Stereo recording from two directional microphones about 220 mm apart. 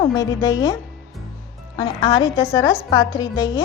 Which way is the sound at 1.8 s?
20° left (ahead or behind).